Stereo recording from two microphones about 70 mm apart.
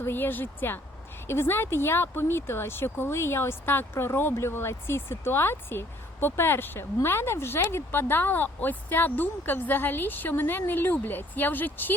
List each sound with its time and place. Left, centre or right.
0.0 s speech: left